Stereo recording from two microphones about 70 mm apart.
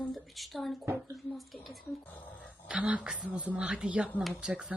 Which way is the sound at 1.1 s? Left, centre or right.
Centre.